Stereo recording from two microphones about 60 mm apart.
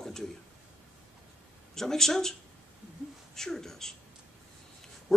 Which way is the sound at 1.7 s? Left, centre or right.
Centre.